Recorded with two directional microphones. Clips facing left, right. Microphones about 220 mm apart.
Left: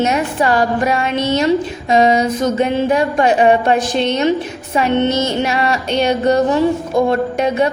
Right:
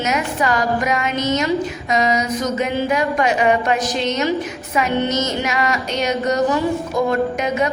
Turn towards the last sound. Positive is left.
turn(degrees=30)  # may be behind; listen again after turning